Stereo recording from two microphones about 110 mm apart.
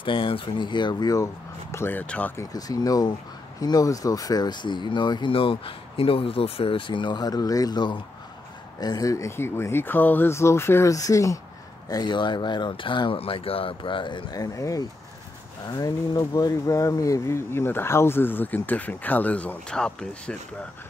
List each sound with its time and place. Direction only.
0.0 s speech: 50° left (ahead or behind); by 2.3 s 15° left (ahead or behind)
2.3 s speech: 30° left (ahead or behind)
11.9 s speech: 40° left (ahead or behind); by 20.3 s 5° left (ahead or behind)